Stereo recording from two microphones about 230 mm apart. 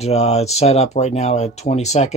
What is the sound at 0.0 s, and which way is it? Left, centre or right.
Speech, left.